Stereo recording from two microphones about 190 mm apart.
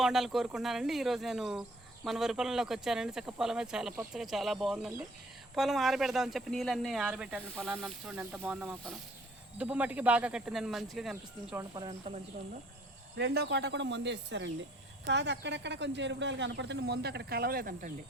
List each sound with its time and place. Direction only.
0.0 s speech: centre (ahead or behind)
11.7 s speech: 20° right (ahead or behind)
13.1 s speech: 60° right (ahead or behind)